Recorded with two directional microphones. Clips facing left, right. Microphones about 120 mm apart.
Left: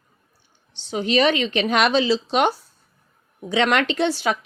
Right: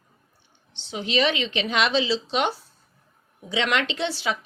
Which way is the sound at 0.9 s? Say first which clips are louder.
Left 5 dB; 50° left (ahead or behind).